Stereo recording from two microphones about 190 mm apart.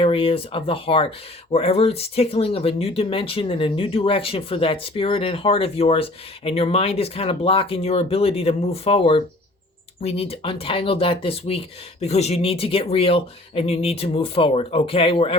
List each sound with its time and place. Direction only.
0.0 s speech: 30° left (ahead or behind)